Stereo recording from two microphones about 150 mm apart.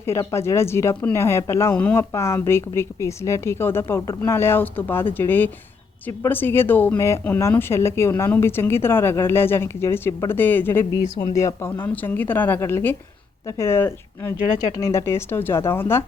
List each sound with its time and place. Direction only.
0.0 s speech: 20° left (ahead or behind)